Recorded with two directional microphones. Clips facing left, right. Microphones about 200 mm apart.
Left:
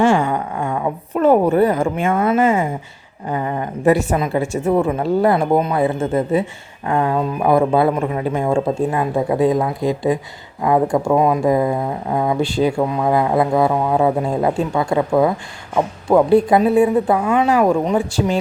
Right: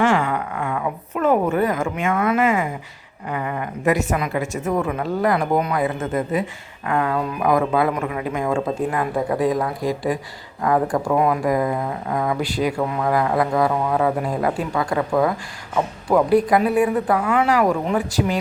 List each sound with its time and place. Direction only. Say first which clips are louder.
0.0 s speech: left 4 dB; 25° left (ahead or behind)